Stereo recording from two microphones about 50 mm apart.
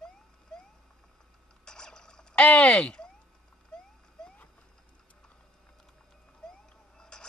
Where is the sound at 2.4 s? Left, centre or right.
Left.